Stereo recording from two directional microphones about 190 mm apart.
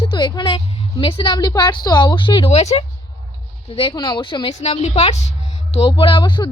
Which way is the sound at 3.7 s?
25° left (ahead or behind).